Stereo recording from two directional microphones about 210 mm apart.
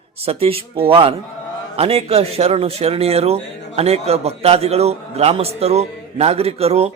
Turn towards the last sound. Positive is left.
turn(degrees=-30)  # may be behind; listen again after turning